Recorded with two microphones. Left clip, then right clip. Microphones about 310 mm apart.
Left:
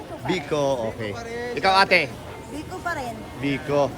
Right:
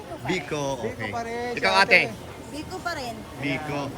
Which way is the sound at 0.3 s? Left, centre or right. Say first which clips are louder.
Left 5 dB; centre.